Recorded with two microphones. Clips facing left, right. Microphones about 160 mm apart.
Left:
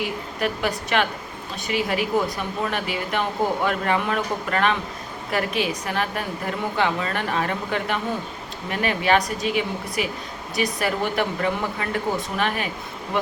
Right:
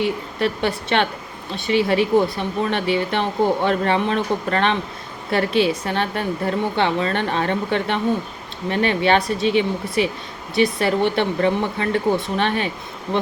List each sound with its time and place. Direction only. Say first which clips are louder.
0.0 s a woman's voice: right 5 dB; 30° right (ahead or behind)